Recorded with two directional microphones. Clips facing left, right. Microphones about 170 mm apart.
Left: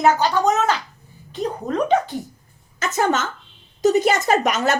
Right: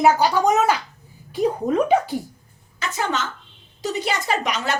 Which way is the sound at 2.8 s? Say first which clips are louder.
Left 5 dB; 45° left (ahead or behind).